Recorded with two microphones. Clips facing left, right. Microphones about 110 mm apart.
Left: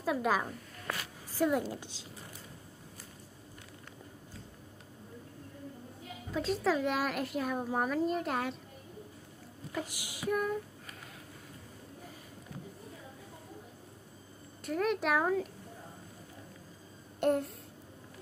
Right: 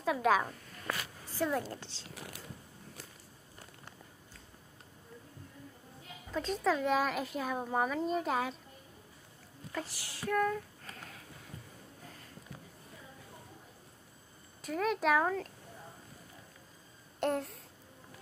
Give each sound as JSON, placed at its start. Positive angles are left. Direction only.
{"t": 0.0, "sound": "a woman's voice", "side_deg": 0}
{"t": 2.1, "sound": "mechanisms", "side_deg": -80}
{"t": 6.3, "sound": "a child's voice", "side_deg": 0}
{"t": 9.7, "sound": "a child's voice", "side_deg": 15}
{"t": 10.9, "sound": "a sound", "side_deg": 0}
{"t": 14.6, "sound": "a child's voice", "side_deg": 0}
{"t": 17.2, "sound": "a child's voice", "side_deg": 0}